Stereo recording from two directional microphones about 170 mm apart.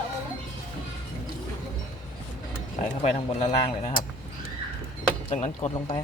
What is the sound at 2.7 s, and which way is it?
Speech, 40° left (ahead or behind).